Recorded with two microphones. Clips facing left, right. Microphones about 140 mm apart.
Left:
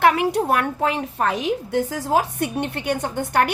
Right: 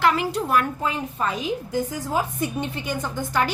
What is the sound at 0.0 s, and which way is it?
A woman's voice, 60° left (ahead or behind).